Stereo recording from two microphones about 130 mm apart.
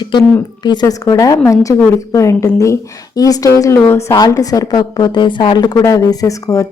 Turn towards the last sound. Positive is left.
turn(degrees=25)  # may be behind; listen again after turning